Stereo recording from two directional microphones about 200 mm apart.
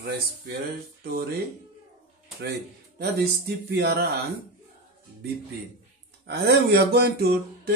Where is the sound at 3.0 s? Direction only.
55° right (ahead or behind).